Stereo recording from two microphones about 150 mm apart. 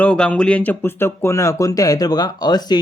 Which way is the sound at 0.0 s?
10° left (ahead or behind).